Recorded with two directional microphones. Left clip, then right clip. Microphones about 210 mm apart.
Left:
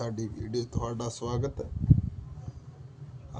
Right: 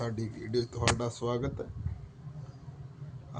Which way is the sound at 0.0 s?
5° left (ahead or behind).